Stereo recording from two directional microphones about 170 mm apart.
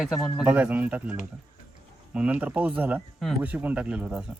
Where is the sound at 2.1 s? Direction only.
5° right (ahead or behind).